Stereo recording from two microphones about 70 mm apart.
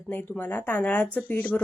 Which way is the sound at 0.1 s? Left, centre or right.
Left.